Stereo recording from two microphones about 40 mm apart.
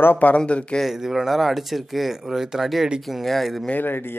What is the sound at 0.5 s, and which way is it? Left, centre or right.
Speech, left.